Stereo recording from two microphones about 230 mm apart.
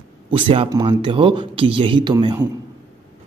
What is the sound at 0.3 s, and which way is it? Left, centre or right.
A man's voice, right.